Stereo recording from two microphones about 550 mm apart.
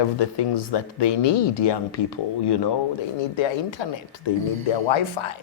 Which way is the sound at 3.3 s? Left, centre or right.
Left.